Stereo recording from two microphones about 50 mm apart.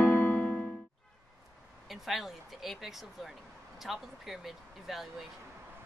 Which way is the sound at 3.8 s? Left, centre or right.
Centre.